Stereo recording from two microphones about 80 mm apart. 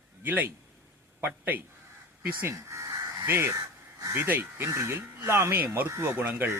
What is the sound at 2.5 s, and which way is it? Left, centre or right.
Speech, right.